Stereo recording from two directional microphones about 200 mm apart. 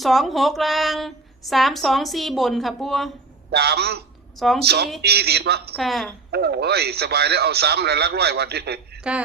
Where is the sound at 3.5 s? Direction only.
55° right (ahead or behind).